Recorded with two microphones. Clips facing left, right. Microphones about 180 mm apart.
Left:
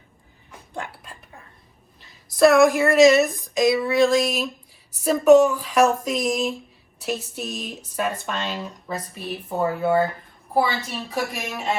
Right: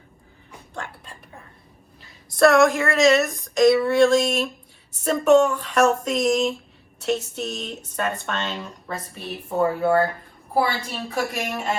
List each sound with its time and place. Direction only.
2.3 s a sound: centre (ahead or behind)
2.6 s speech: 15° left (ahead or behind)
3.4 s speech: centre (ahead or behind)